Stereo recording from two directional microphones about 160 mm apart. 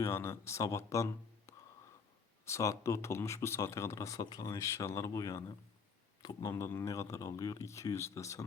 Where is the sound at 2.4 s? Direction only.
20° left (ahead or behind).